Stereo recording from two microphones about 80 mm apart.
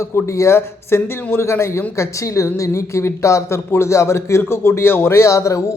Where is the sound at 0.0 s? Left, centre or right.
Left.